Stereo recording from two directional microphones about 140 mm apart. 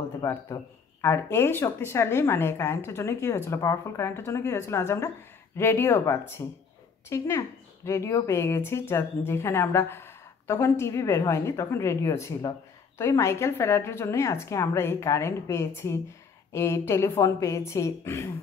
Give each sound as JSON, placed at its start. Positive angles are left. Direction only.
{"t": 0.2, "sound": "speech", "side_deg": 20}